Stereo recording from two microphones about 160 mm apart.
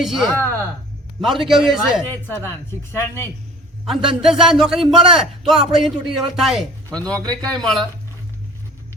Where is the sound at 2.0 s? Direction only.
10° left (ahead or behind).